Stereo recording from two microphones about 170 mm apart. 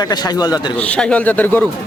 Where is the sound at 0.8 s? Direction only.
5° left (ahead or behind).